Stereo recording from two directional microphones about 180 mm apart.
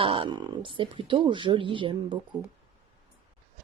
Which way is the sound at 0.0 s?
30° right (ahead or behind).